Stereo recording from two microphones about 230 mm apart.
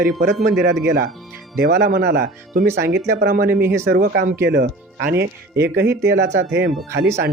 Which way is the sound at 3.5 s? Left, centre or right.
Centre.